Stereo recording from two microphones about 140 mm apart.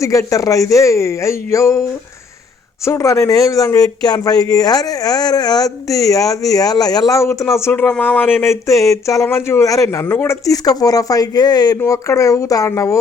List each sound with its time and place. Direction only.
0.0 s speech: 20° left (ahead or behind)
2.8 s speech: 20° left (ahead or behind)